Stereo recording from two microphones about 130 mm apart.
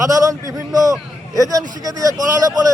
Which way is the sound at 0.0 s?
25° right (ahead or behind).